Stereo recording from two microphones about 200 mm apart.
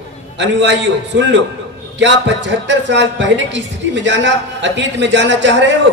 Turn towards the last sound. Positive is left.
turn(degrees=-65)  # may be behind; listen again after turning